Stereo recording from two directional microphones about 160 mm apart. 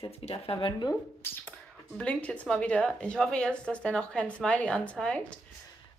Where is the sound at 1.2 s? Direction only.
10° left (ahead or behind).